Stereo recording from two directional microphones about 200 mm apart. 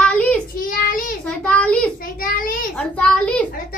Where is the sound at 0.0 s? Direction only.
5° left (ahead or behind).